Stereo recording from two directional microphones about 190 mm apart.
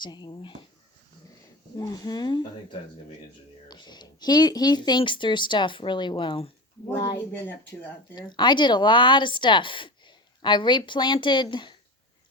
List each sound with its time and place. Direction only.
0.0 s speech: 25° left (ahead or behind)
1.7 s speech: 20° left (ahead or behind)
3.7 s speech: 20° left (ahead or behind)